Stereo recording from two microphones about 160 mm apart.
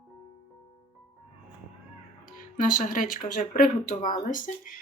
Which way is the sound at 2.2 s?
55° left (ahead or behind).